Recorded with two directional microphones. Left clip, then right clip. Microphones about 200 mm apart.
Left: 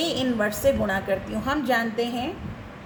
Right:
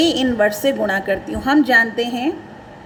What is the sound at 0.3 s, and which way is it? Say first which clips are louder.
A woman's voice: right 6 dB; 45° right (ahead or behind).